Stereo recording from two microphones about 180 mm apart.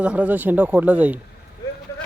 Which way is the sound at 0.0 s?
5° right (ahead or behind).